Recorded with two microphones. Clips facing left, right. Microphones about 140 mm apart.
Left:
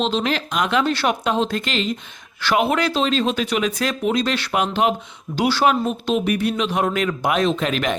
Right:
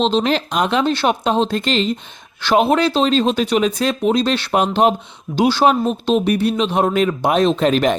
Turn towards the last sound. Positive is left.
turn(degrees=-35)  # may be behind; listen again after turning